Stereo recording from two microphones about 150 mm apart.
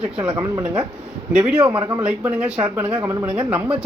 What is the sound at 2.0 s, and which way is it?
Speech, 10° right (ahead or behind).